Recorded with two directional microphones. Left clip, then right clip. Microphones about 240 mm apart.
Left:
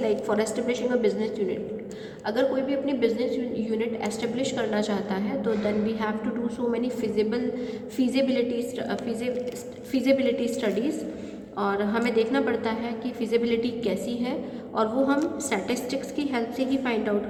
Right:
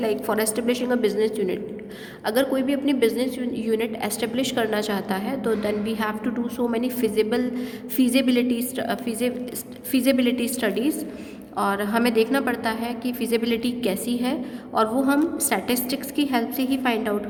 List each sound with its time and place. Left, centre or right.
0.0 s a woman's voice: right